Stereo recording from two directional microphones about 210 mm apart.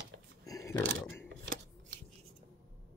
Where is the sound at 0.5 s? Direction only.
15° left (ahead or behind).